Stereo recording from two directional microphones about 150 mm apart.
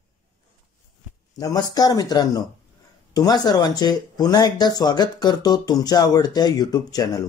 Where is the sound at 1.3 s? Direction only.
25° left (ahead or behind).